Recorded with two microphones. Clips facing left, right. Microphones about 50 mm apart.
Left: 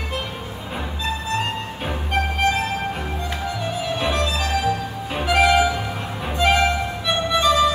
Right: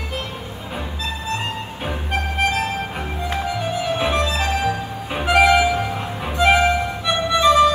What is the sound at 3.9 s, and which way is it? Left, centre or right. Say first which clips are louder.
Music: right 1 dB; right.